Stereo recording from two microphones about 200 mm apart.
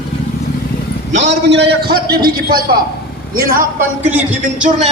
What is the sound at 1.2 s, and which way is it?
A man's voice, 60° right (ahead or behind).